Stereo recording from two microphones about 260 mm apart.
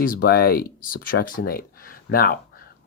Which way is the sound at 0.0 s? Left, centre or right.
Left.